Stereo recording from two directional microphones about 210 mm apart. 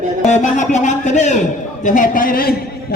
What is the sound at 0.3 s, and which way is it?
A man's voice, 35° left (ahead or behind).